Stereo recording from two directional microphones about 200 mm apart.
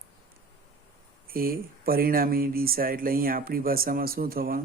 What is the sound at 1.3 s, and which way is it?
Speech, 45° right (ahead or behind).